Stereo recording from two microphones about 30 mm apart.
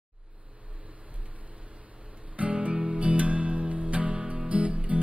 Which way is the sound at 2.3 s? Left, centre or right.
Right.